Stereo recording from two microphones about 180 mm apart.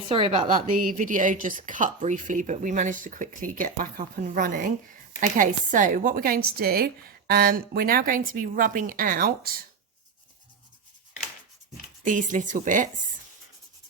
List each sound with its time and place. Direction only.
0.1 s a woman's voice: 30° right (ahead or behind)
0.5 s a woman's voice: 50° right (ahead or behind)
12.0 s a woman's voice: 45° right (ahead or behind)